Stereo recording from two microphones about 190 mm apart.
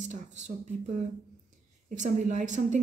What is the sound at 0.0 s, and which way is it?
A woman's voice, 40° right (ahead or behind).